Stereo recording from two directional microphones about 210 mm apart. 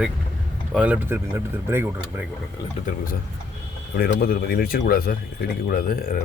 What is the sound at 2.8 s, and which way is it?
Speech, 40° left (ahead or behind).